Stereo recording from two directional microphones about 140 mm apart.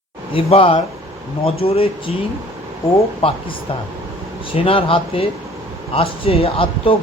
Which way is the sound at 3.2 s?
40° left (ahead or behind).